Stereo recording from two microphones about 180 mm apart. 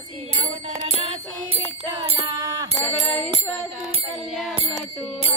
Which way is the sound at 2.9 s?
5° left (ahead or behind).